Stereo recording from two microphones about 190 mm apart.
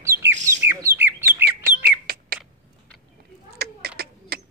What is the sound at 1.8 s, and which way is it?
Bird, 50° right (ahead or behind).